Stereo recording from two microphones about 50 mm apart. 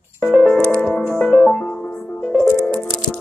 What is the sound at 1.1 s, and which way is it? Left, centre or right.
Music, centre.